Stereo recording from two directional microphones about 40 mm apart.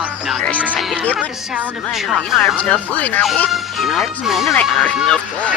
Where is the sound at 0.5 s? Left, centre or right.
Right.